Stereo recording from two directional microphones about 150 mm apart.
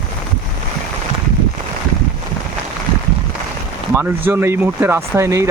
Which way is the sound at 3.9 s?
10° right (ahead or behind).